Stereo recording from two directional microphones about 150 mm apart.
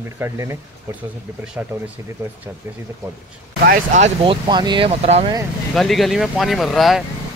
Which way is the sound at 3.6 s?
85° right.